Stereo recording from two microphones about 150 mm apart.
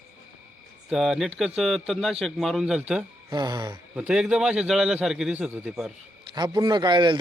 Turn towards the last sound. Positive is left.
turn(degrees=-30)  # may be behind; listen again after turning